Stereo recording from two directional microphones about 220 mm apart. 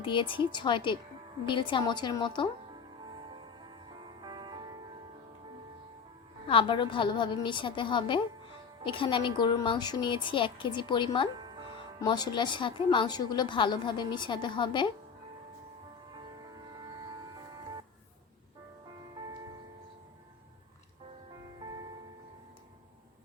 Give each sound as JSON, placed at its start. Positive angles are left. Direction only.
{"t": 0.0, "sound": "a woman's voice", "side_deg": 20}
{"t": 4.2, "sound": "music", "side_deg": -20}
{"t": 6.5, "sound": "a woman's voice", "side_deg": 25}